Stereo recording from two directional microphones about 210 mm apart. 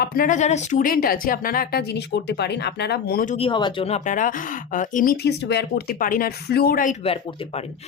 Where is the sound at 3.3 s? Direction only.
25° left (ahead or behind); by 6.9 s 40° left (ahead or behind).